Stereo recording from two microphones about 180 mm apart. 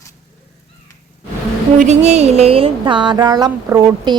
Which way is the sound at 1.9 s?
40° right (ahead or behind).